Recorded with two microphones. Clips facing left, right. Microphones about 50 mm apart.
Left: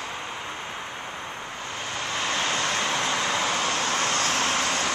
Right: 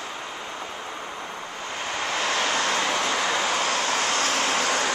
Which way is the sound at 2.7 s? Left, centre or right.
Right.